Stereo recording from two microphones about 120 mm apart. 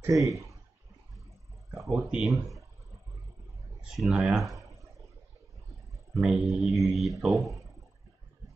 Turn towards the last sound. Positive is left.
turn(degrees=0)  # may be behind; listen again after turning